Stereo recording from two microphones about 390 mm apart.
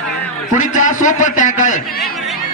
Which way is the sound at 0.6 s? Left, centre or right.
Centre.